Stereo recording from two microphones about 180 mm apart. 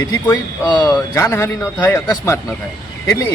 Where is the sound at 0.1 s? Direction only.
20° left (ahead or behind).